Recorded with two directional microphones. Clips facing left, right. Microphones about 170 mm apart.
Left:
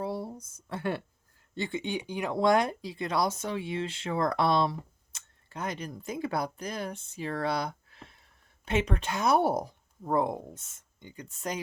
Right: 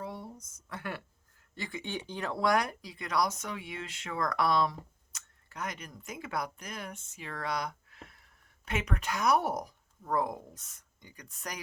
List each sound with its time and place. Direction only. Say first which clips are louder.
0.0 s speech: left 7 dB; 35° left (ahead or behind)
1.9 s speech: left 4 dB; 10° left (ahead or behind)